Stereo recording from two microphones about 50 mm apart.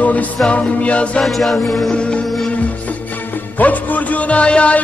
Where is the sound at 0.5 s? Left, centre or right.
Left.